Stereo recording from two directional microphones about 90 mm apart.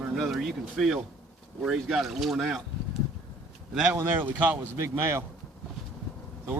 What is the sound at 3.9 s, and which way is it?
Speech, 25° right (ahead or behind).